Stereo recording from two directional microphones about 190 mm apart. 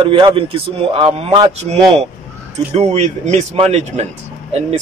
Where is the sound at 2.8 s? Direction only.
35° right (ahead or behind).